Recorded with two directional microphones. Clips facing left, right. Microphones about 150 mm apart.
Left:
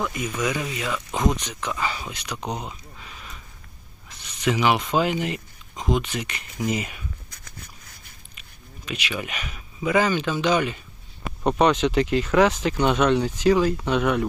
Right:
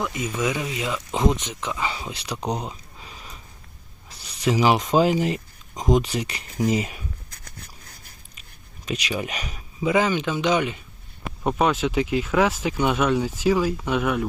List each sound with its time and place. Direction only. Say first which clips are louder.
0.0 s speech: right 1 dB; 20° right (ahead or behind)
8.4 s a sound: left 3 dB; 40° right (ahead or behind)
9.8 s speech: even; 20° right (ahead or behind)
11.4 s speech: left 2 dB; 5° right (ahead or behind)